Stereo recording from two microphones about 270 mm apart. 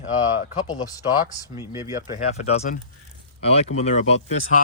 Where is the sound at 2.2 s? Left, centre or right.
Left.